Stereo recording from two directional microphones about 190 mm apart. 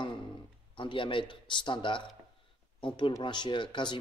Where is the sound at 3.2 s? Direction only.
25° left (ahead or behind).